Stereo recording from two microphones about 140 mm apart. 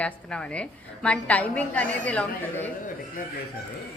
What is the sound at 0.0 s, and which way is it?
A woman's voice, 5° left (ahead or behind).